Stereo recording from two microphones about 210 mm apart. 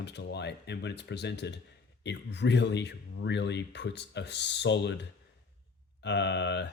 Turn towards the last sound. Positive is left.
turn(degrees=55)  # may be behind; listen again after turning